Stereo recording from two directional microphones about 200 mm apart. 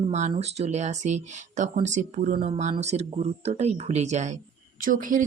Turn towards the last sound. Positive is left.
turn(degrees=-40)  # may be behind; listen again after turning